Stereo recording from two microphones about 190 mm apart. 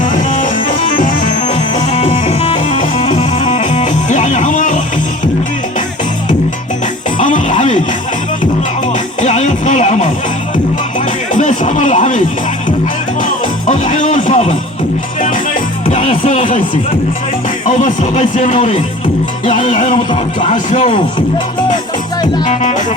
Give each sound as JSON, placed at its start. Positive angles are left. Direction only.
{"t": 0.3, "sound": "music", "side_deg": 45}
{"t": 7.2, "sound": "music", "side_deg": 40}
{"t": 9.2, "sound": "music", "side_deg": 40}
{"t": 11.3, "sound": "a sound", "side_deg": 40}
{"t": 13.7, "sound": "music", "side_deg": 40}
{"t": 15.9, "sound": "a sound", "side_deg": 40}
{"t": 17.7, "sound": "speech", "side_deg": 40}
{"t": 19.6, "sound": "music", "side_deg": 40}
{"t": 20.4, "sound": "speech", "side_deg": 40}